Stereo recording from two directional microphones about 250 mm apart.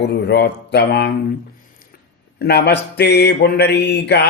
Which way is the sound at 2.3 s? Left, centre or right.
Left.